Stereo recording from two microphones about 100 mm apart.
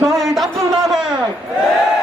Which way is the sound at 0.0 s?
Centre (ahead or behind).